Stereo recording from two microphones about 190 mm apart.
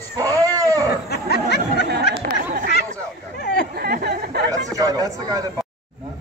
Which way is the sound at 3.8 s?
55° right (ahead or behind).